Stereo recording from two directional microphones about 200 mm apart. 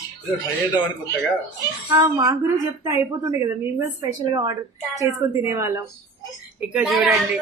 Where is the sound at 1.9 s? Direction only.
15° right (ahead or behind).